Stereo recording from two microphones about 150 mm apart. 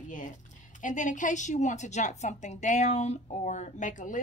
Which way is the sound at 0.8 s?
60° left (ahead or behind).